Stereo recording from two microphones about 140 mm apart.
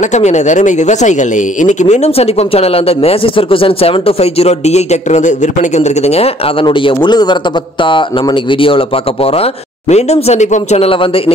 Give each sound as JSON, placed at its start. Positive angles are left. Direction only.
{"t": 0.0, "sound": "speech", "side_deg": 55}